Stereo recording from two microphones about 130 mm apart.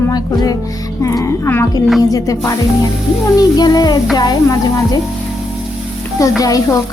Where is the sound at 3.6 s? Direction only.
30° left (ahead or behind).